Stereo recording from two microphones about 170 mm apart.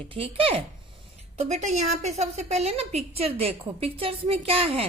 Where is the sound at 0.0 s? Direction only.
35° right (ahead or behind).